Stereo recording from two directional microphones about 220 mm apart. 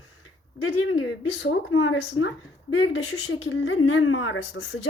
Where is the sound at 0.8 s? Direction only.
60° left (ahead or behind).